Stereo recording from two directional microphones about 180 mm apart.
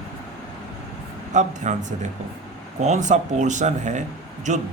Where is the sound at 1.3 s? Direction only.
40° right (ahead or behind).